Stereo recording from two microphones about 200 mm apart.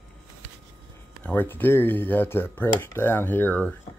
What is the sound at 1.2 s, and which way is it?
Speech, 10° left (ahead or behind).